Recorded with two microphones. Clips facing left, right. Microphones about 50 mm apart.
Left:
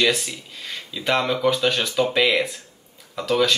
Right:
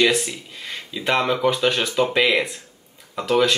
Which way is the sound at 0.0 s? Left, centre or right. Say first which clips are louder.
Right 2 dB; centre.